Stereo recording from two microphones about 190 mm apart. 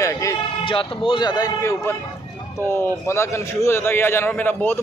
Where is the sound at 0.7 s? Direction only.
25° left (ahead or behind).